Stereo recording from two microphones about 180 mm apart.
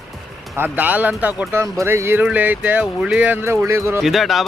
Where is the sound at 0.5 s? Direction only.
10° right (ahead or behind).